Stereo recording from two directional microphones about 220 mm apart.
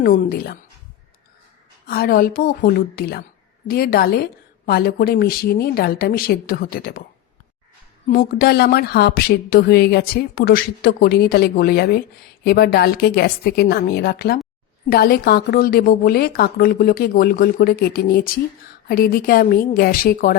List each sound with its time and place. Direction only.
0.0 s a woman's voice: 40° left (ahead or behind)
1.9 s speech: 40° left (ahead or behind)
8.0 s a woman's voice: 40° left (ahead or behind)